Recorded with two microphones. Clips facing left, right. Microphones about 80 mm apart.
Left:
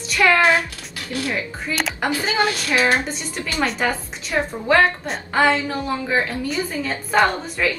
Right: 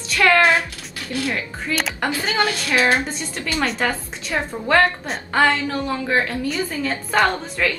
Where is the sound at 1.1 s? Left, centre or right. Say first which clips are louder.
Even; centre.